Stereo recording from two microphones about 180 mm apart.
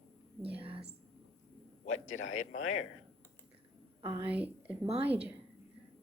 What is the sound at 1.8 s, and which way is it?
Speech, 45° left (ahead or behind).